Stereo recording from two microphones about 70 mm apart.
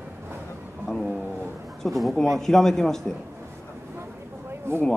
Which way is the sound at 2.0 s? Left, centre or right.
Centre.